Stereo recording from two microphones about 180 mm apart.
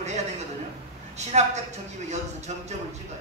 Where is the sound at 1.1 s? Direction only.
40° right (ahead or behind).